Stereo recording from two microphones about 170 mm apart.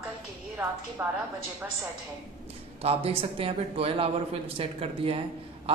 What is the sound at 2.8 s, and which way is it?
A woman's voice, 35° right (ahead or behind).